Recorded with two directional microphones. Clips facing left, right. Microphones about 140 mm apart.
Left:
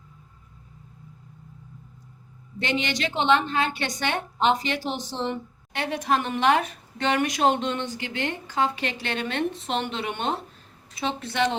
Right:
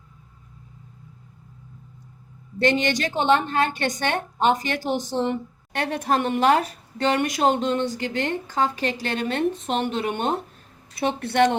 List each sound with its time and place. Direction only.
2.6 s a woman's voice: 45° right (ahead or behind)
11.0 s speech: 55° right (ahead or behind)